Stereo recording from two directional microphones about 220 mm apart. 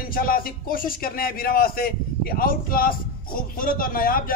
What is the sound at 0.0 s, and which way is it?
Speech, 40° left (ahead or behind).